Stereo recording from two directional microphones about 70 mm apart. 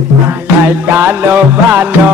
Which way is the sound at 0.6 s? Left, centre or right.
Right.